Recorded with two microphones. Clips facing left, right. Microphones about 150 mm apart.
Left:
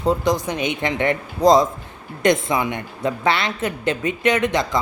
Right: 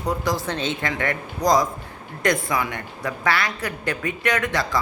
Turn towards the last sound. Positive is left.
turn(degrees=20)  # may be behind; listen again after turning